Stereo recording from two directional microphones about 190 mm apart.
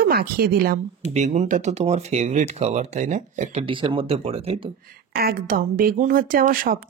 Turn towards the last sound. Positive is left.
turn(degrees=-45)  # may be behind; listen again after turning